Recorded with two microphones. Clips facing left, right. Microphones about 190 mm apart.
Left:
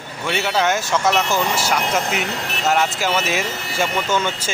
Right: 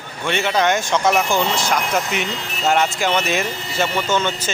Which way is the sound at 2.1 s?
65° left (ahead or behind).